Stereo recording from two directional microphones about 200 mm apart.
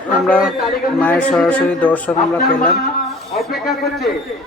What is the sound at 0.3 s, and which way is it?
Speech, centre (ahead or behind).